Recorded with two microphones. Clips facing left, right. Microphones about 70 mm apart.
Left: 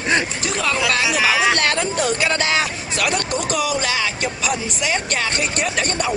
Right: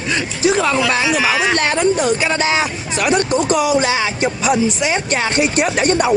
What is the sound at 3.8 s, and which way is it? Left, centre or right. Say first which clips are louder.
Music: right 5 dB; right.